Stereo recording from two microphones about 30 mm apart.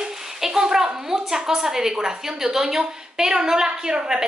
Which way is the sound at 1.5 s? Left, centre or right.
Centre.